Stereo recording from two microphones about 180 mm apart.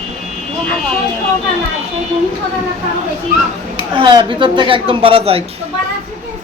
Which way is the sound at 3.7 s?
25° right (ahead or behind).